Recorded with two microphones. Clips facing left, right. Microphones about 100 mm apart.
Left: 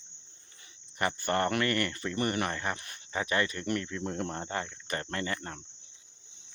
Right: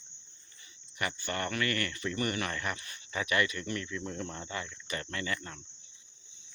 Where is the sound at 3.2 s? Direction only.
35° left (ahead or behind).